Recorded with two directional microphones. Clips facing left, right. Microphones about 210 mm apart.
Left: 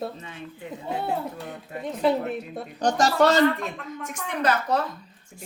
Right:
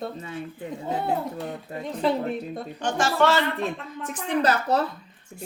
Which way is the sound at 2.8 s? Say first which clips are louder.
Left 3 dB; 40° left (ahead or behind).